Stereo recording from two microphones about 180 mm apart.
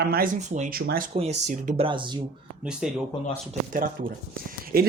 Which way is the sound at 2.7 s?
5° right (ahead or behind).